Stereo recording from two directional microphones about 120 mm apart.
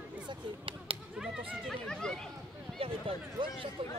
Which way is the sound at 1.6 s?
5° left (ahead or behind).